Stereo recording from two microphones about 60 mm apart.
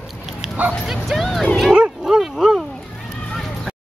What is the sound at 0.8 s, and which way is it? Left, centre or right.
Bow-wow, centre.